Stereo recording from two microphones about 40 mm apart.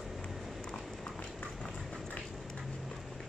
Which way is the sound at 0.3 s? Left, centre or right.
Centre.